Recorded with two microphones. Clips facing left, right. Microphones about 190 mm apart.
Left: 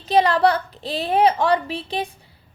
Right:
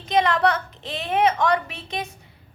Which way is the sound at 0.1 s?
35° left (ahead or behind).